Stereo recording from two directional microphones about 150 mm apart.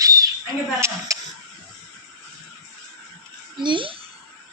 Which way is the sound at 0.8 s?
20° right (ahead or behind).